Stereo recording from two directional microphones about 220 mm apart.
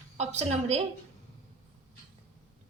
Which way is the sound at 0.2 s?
30° right (ahead or behind).